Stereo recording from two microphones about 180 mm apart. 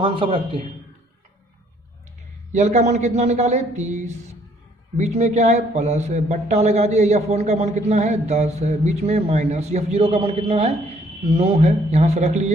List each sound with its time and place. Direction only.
0.0 s a man's voice: 30° right (ahead or behind)
2.5 s a man's voice: 40° right (ahead or behind)